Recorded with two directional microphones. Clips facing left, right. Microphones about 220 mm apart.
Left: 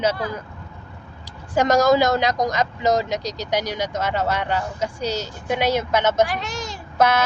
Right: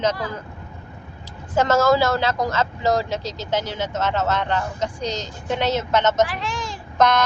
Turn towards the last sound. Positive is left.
turn(degrees=5)  # may be behind; listen again after turning